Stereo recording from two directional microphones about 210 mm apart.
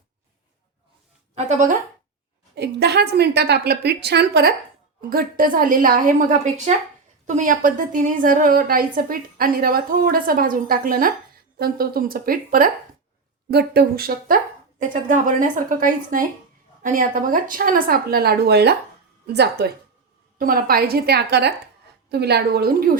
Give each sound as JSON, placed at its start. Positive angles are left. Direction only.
{"t": 1.5, "sound": "a woman's voice", "side_deg": -35}
{"t": 2.6, "sound": "a woman's voice", "side_deg": -50}